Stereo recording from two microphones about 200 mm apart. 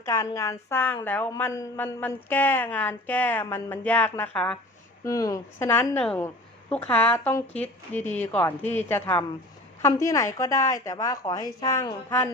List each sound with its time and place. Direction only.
0.0 s a woman's voice: 15° left (ahead or behind)
5.0 s a woman's voice: 15° left (ahead or behind)